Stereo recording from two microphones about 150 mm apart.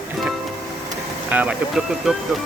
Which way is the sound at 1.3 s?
10° right (ahead or behind).